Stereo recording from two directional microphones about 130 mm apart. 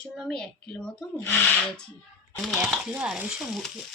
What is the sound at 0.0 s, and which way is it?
Speech, 5° left (ahead or behind).